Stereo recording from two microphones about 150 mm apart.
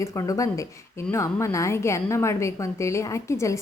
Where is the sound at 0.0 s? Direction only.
20° left (ahead or behind).